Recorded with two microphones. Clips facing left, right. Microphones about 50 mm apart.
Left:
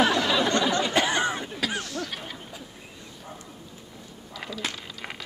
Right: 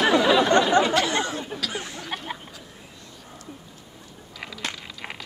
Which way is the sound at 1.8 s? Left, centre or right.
Centre.